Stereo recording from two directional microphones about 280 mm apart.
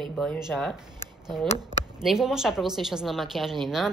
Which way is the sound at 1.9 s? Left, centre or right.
Centre.